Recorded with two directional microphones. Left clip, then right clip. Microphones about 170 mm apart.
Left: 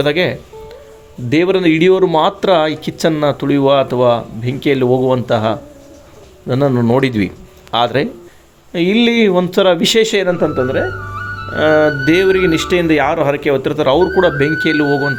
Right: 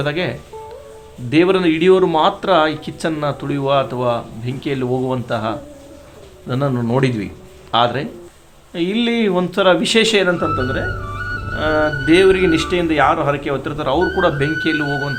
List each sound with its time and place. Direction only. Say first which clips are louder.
0.0 s a man's voice: left 6 dB; 40° left (ahead or behind)